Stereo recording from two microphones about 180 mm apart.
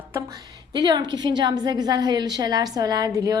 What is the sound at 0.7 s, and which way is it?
A woman's voice, 25° right (ahead or behind).